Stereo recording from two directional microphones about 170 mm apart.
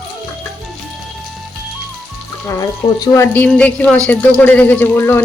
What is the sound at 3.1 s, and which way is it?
Speech, 15° left (ahead or behind).